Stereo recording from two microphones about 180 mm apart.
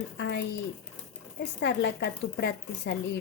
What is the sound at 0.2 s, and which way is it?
Speech, 70° left (ahead or behind).